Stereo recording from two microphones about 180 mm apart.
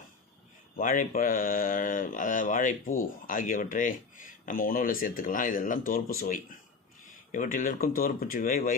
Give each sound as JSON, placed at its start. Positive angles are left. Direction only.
{"t": 0.8, "sound": "speech", "side_deg": 45}